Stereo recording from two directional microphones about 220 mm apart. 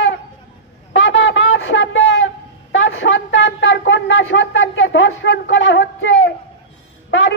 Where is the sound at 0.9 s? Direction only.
55° left (ahead or behind).